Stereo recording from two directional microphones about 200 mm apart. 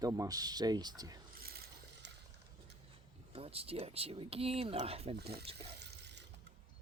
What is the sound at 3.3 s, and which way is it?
Speech, 30° right (ahead or behind).